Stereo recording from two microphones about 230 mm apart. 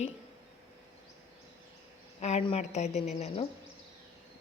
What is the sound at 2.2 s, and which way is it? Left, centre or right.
A woman's voice, left.